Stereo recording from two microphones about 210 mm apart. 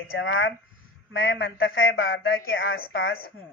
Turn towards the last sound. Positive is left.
turn(degrees=50)  # may be behind; listen again after turning